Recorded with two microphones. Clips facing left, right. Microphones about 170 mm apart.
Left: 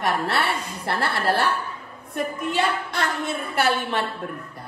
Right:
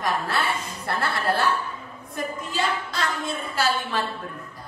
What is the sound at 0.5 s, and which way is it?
A woman's voice, 65° left (ahead or behind).